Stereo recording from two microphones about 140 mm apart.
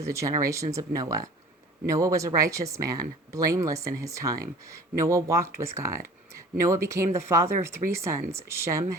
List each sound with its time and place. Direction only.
0.0 s speech: 20° right (ahead or behind)